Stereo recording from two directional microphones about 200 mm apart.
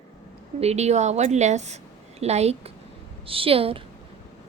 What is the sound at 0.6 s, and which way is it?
A woman's voice, 35° right (ahead or behind).